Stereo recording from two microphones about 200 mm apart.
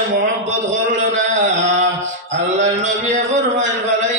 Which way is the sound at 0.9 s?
35° right (ahead or behind).